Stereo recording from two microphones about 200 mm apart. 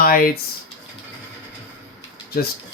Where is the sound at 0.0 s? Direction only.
45° left (ahead or behind).